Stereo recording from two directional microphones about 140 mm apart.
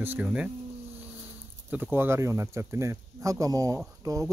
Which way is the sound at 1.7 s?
15° right (ahead or behind).